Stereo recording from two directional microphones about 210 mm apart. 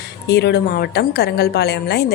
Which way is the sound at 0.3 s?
50° left (ahead or behind).